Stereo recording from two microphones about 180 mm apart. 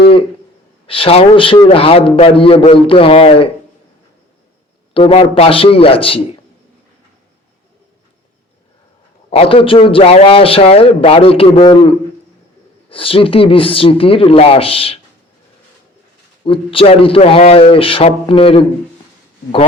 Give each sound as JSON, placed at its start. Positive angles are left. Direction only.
{"t": 0.9, "sound": "a man's voice", "side_deg": 30}
{"t": 4.9, "sound": "a man's voice", "side_deg": 30}
{"t": 9.3, "sound": "a man's voice", "side_deg": 30}
{"t": 16.4, "sound": "a man's voice", "side_deg": 30}